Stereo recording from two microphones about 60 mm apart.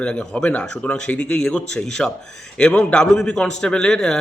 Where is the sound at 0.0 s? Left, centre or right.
Centre.